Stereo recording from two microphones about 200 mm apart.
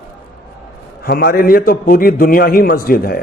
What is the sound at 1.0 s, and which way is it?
A man's voice, 50° left (ahead or behind).